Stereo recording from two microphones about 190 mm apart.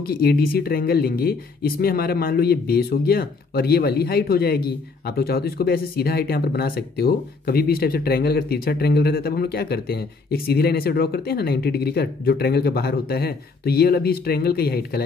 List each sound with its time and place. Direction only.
0.0 s speech: 55° left (ahead or behind)